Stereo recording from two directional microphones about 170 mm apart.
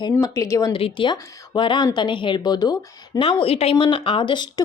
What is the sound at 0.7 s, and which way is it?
Speech, 30° left (ahead or behind).